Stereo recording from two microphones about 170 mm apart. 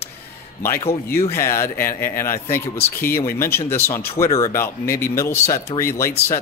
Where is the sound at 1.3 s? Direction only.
15° left (ahead or behind).